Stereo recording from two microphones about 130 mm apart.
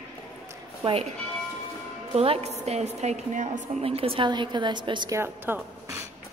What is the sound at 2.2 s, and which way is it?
A woman's voice, 55° right (ahead or behind).